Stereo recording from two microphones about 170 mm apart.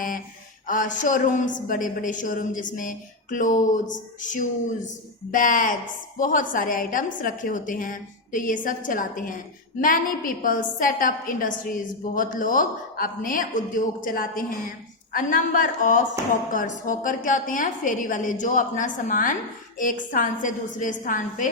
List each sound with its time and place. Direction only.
0.7 s a woman's voice: 50° left (ahead or behind)